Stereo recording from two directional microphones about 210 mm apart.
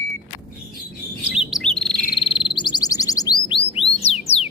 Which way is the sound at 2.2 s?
25° left (ahead or behind).